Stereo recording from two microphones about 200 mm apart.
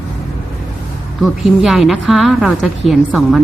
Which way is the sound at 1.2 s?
Centre (ahead or behind).